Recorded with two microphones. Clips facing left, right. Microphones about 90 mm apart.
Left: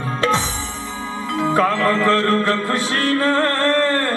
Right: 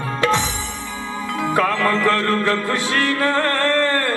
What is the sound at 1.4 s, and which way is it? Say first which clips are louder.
Music: left 2 dB; 25° left (ahead or behind).